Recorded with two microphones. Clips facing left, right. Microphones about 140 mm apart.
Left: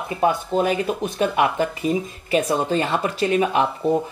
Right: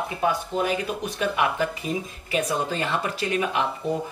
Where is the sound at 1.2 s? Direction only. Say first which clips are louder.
Left 4 dB; 30° left (ahead or behind).